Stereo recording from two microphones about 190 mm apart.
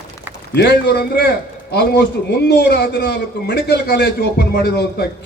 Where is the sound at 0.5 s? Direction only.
60° left (ahead or behind).